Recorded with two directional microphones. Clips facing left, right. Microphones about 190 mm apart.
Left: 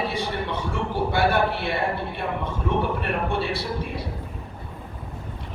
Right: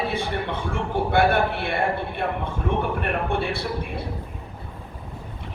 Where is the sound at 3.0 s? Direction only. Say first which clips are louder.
Right 1 dB; 55° right (ahead or behind).